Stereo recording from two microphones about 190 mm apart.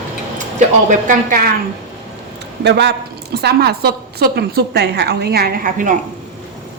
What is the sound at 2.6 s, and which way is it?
A woman's voice, 65° right (ahead or behind).